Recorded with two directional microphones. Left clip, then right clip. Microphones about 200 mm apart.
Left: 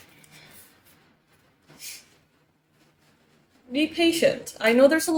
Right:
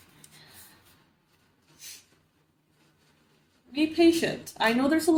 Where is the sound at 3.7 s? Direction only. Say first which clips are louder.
Even; 35° left (ahead or behind).